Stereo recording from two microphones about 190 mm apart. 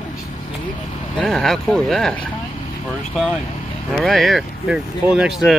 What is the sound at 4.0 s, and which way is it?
Speech, centre (ahead or behind).